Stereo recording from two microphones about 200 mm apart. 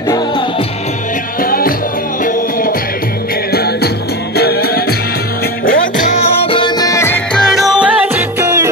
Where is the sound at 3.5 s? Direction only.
50° left (ahead or behind).